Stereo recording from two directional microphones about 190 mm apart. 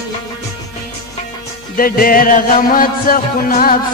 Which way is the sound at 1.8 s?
50° left (ahead or behind).